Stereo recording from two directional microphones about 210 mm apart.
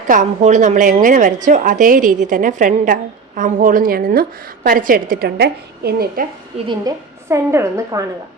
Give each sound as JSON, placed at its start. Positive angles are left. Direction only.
{"t": 0.1, "sound": "a woman's voice", "side_deg": -35}
{"t": 6.7, "sound": "a woman's voice", "side_deg": -15}